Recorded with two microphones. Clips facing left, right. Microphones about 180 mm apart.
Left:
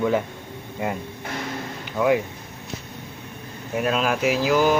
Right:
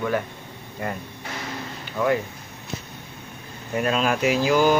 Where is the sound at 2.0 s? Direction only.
10° left (ahead or behind).